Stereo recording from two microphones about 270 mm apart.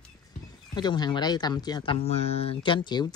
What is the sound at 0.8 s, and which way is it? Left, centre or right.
Speech, centre.